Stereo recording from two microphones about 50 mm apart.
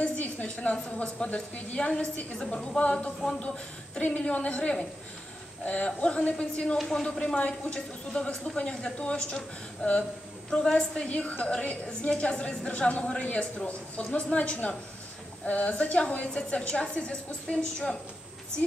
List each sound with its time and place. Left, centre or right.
0.0 s a woman's voice: left
7.3 s a woman's voice: left
11.1 s a woman's voice: left